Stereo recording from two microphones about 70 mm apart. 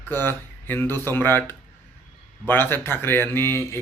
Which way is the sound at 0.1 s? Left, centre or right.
Left.